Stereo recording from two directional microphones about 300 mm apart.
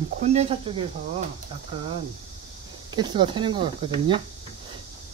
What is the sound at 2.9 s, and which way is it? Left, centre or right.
Speech, centre.